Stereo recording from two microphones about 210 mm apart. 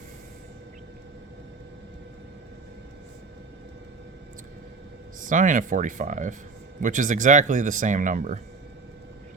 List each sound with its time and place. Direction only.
5.3 s speech: 40° right (ahead or behind)